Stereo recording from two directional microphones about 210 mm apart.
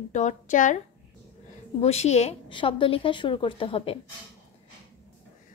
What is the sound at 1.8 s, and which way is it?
A woman's voice, 30° left (ahead or behind).